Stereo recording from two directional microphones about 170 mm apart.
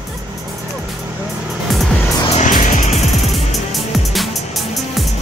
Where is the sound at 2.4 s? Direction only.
50° left (ahead or behind).